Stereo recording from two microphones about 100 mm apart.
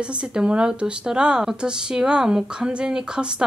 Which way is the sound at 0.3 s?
10° right (ahead or behind).